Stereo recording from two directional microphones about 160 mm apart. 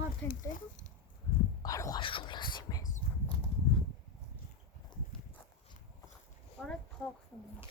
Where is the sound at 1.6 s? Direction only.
20° left (ahead or behind).